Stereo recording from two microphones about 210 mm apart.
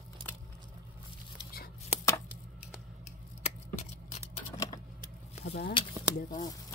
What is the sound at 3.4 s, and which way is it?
Scissors, 30° left (ahead or behind).